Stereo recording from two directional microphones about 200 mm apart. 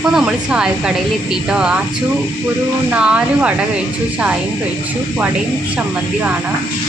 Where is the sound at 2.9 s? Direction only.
5° right (ahead or behind).